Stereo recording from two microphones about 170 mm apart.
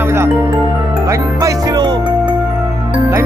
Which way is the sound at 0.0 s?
15° right (ahead or behind).